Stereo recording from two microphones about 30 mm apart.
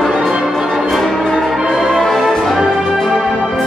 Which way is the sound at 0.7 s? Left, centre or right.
Centre.